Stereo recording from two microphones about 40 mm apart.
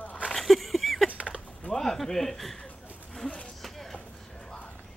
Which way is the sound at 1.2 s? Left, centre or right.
Right.